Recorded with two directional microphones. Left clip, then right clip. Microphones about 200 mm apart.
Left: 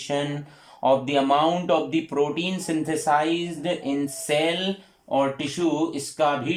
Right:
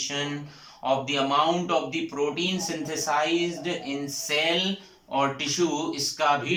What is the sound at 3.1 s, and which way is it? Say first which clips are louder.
Speech: left 4 dB; 40° left (ahead or behind).